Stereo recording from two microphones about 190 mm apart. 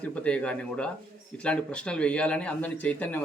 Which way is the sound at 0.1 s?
5° left (ahead or behind).